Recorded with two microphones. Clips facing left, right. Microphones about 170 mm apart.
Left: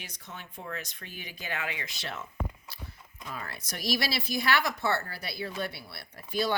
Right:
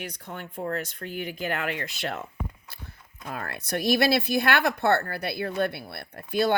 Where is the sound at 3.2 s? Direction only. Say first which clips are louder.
Right 7 dB; 60° right (ahead or behind).